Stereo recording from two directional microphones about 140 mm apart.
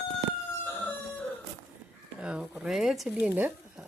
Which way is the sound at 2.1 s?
5° right (ahead or behind).